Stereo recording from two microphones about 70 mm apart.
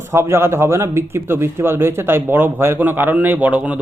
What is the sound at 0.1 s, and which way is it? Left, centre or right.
A man's voice, right.